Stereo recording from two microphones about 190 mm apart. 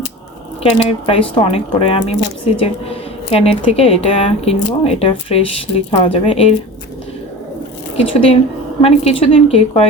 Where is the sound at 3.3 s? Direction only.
30° left (ahead or behind).